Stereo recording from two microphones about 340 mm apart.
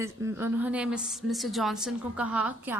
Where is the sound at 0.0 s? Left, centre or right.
Centre.